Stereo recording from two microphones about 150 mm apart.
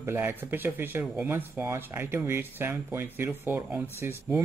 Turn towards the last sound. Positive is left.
turn(degrees=-15)  # may be behind; listen again after turning